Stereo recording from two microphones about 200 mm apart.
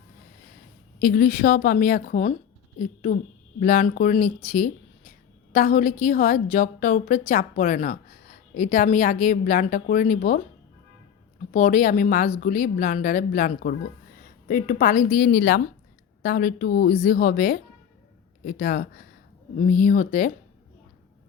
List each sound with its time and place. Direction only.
1.0 s a woman's voice: 45° left (ahead or behind)
3.6 s a woman's voice: 40° left (ahead or behind)
11.5 s a woman's voice: 40° left (ahead or behind)